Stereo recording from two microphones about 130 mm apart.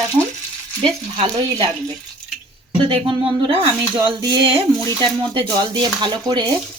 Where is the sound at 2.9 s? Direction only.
40° right (ahead or behind).